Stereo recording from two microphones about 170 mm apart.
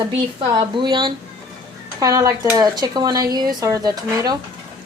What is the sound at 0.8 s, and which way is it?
Speech, 25° right (ahead or behind).